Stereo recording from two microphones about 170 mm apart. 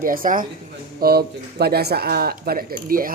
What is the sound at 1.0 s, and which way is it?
Speech, 65° right (ahead or behind).